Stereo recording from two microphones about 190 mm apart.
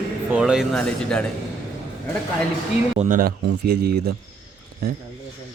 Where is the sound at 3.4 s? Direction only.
55° right (ahead or behind).